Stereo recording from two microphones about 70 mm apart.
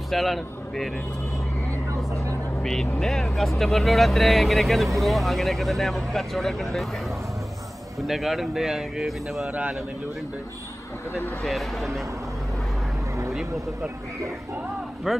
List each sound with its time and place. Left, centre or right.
0.1 s a man's voice: centre
2.6 s speech: centre
8.0 s speech: centre
9.5 s a man's voice: centre
11.4 s speech: centre
15.1 s speech: centre